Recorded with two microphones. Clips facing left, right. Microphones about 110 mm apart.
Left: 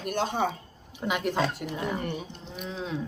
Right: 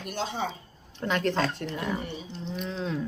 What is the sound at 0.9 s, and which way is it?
Speech, 10° left (ahead or behind).